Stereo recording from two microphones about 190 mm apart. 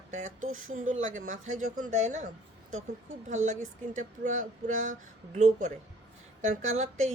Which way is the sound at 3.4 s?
40° right (ahead or behind).